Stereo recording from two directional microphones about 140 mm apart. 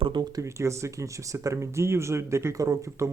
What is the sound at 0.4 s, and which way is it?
Speech, 20° right (ahead or behind).